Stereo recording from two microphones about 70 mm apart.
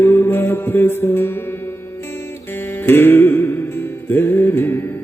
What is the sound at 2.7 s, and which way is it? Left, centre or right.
Music, left.